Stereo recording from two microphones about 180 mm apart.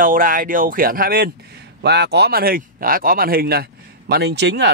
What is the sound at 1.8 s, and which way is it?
Speech, 70° right (ahead or behind).